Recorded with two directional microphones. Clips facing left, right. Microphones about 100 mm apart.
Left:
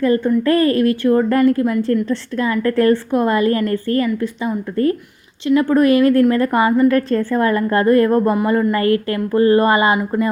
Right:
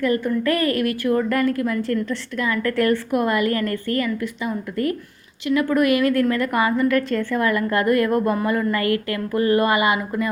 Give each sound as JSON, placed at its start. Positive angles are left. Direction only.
{"t": 0.0, "sound": "a woman's voice", "side_deg": 30}